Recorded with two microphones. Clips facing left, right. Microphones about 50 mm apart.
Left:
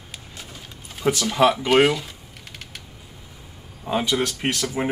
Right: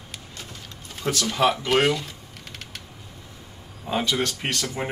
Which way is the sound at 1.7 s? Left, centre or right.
Centre.